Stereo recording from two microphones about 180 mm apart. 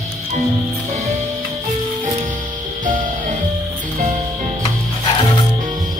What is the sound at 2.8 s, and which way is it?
Music, 45° right (ahead or behind).